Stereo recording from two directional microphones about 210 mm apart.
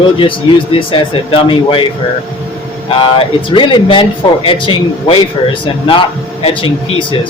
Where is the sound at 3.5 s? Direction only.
25° left (ahead or behind).